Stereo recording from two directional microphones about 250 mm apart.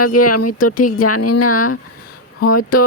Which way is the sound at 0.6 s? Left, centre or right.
Left.